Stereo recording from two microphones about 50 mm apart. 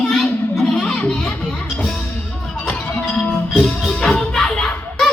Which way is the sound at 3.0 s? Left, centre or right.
Left.